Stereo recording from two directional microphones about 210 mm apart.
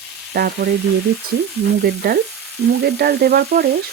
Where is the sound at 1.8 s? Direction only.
45° right (ahead or behind).